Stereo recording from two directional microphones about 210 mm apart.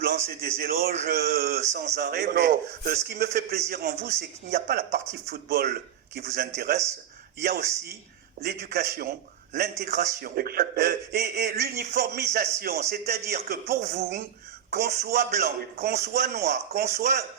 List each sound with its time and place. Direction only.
0.0 s a man's voice: 45° right (ahead or behind)
7.4 s a man's voice: 45° right (ahead or behind)